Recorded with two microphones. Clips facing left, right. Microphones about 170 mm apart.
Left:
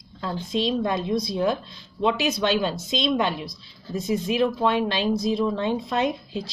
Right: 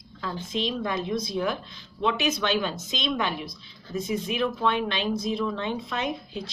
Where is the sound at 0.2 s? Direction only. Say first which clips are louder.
Left 4 dB; 35° left (ahead or behind).